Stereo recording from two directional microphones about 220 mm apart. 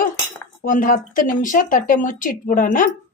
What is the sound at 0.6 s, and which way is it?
Speech, 40° left (ahead or behind).